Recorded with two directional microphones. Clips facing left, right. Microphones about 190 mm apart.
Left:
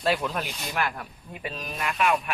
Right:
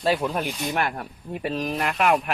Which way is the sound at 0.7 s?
35° right (ahead or behind).